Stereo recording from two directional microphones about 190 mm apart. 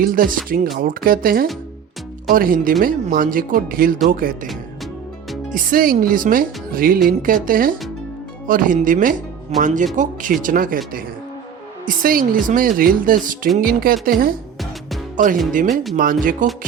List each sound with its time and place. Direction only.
0.0 s speech: 45° right (ahead or behind)
5.5 s speech: 45° right (ahead or behind)
11.9 s speech: 45° right (ahead or behind)
15.7 s speech: centre (ahead or behind)
16.0 s speech: 45° right (ahead or behind)